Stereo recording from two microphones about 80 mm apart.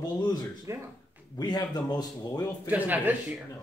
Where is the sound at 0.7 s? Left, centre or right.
Right.